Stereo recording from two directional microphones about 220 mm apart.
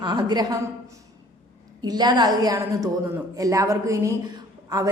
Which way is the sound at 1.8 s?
20° right (ahead or behind).